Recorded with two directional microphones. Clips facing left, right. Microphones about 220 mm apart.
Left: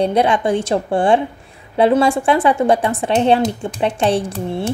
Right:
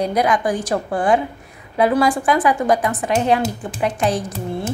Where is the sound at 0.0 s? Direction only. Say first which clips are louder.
Left 3 dB; 30° left (ahead or behind).